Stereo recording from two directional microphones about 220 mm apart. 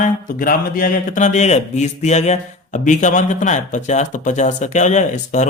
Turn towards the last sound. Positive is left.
turn(degrees=35)  # may be behind; listen again after turning